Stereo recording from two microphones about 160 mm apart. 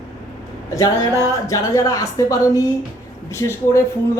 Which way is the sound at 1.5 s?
20° left (ahead or behind).